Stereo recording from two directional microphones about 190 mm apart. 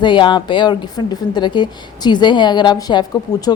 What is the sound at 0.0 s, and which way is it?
A woman's voice, 25° left (ahead or behind).